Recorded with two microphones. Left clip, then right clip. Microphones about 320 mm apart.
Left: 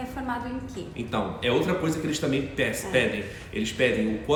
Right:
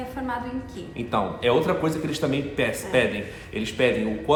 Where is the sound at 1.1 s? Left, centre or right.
Centre.